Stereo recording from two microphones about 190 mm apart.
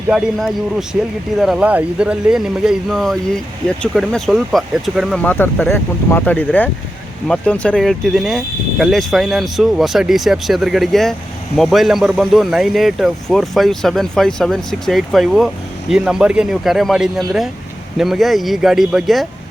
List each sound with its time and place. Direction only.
0.1 s speech: centre (ahead or behind)